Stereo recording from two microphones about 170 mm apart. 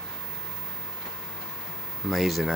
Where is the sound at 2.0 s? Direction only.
Centre (ahead or behind).